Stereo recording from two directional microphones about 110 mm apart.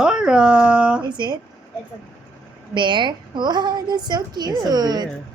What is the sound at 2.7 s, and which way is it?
A woman's voice, 45° right (ahead or behind).